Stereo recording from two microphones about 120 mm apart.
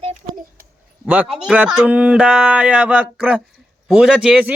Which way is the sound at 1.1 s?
15° right (ahead or behind).